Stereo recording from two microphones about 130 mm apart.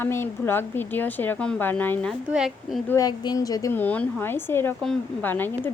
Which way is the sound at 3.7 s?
15° left (ahead or behind).